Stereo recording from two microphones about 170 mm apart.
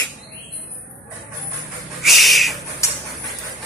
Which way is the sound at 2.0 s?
Centre (ahead or behind).